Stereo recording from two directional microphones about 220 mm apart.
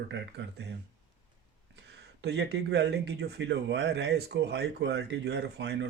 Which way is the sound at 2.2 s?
50° right (ahead or behind).